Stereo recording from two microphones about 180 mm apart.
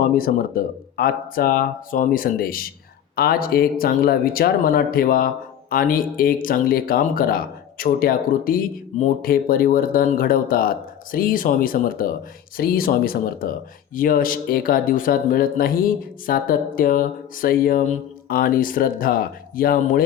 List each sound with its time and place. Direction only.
0.0 s speech: 55° left (ahead or behind)